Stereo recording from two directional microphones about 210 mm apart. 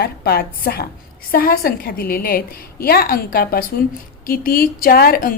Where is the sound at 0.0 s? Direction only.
50° left (ahead or behind).